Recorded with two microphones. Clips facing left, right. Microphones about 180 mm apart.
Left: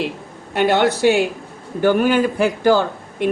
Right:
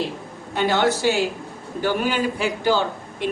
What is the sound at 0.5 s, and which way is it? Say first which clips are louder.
A man's voice: left 4 dB; 65° left (ahead or behind).